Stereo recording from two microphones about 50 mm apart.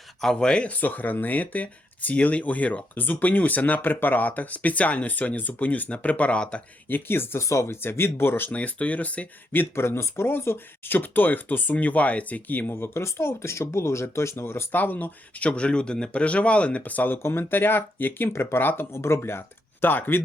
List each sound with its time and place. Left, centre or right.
0.2 s speech: centre
0.7 s speech: left
6.8 s speech: left
7.4 s speech: left
7.8 s speech: left
8.4 s speech: left
10.9 s speech: left
12.7 s speech: left
14.8 s speech: left
15.4 s speech: left
17.2 s speech: left
18.3 s speech: left
18.6 s speech: left
18.9 s speech: left